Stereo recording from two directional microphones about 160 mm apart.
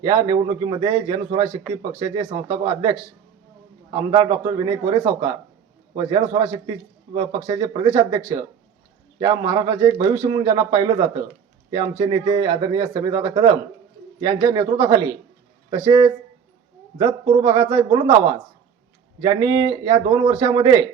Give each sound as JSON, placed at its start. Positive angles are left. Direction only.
{"t": 0.0, "sound": "speech", "side_deg": -25}
{"t": 4.1, "sound": "speech", "side_deg": -25}
{"t": 6.1, "sound": "speech", "side_deg": -25}